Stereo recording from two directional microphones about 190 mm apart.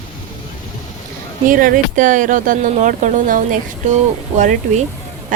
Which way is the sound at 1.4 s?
45° right (ahead or behind).